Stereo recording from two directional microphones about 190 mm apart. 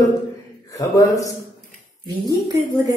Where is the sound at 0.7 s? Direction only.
15° left (ahead or behind).